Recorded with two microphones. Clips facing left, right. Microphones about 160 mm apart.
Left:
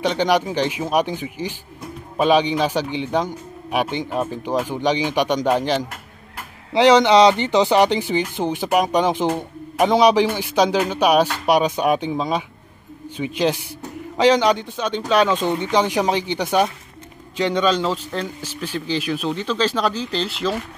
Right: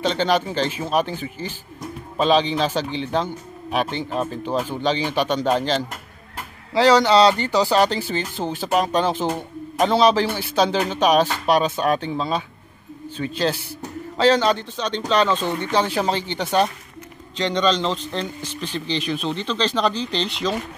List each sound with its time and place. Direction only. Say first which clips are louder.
0.0 s speech: left 2 dB; 10° left (ahead or behind)